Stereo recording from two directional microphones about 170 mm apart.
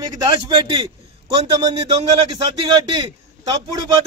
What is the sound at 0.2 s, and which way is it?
Speech, 30° right (ahead or behind).